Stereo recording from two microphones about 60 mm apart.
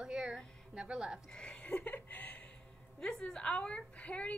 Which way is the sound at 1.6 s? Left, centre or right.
Left.